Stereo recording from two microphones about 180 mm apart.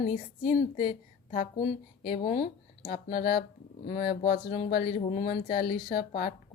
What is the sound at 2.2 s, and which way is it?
Speech, 40° left (ahead or behind).